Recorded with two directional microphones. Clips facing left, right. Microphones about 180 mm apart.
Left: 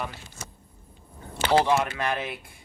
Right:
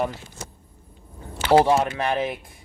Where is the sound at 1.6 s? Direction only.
30° right (ahead or behind).